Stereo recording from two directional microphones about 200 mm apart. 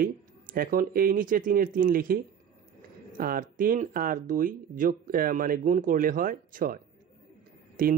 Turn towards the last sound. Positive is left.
turn(degrees=-45)  # may be behind; listen again after turning